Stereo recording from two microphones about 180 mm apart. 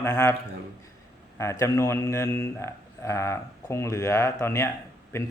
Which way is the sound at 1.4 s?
15° left (ahead or behind).